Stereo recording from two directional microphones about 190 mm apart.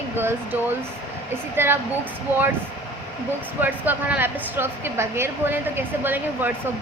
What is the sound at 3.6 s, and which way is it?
A woman's voice, 10° right (ahead or behind).